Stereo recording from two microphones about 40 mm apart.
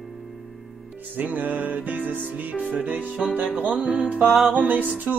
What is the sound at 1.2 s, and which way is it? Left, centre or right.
Music, right.